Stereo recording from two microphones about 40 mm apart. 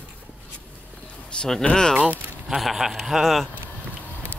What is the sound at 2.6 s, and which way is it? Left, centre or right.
Speech, centre.